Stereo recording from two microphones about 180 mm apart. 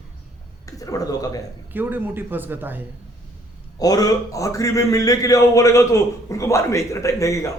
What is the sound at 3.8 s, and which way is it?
Speech, 20° left (ahead or behind).